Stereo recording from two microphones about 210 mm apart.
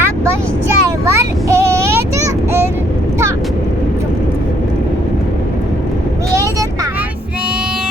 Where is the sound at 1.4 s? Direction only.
15° right (ahead or behind).